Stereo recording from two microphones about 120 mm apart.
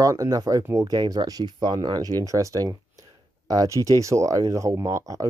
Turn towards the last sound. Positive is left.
turn(degrees=-30)  # may be behind; listen again after turning